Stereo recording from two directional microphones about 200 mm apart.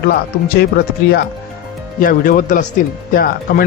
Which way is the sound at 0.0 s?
50° left (ahead or behind).